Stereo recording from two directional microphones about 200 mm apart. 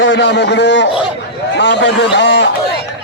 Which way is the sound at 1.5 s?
65° left (ahead or behind).